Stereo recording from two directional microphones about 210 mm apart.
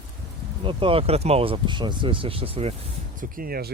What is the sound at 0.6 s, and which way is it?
Speech, 25° right (ahead or behind).